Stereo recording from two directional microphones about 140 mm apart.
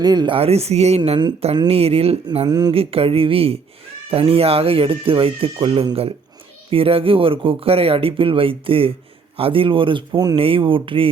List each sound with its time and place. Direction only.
0.0 s speech: 30° right (ahead or behind)
0.3 s speech: 45° right (ahead or behind)
2.5 s speech: 30° right (ahead or behind)
2.7 s speech: 40° right (ahead or behind)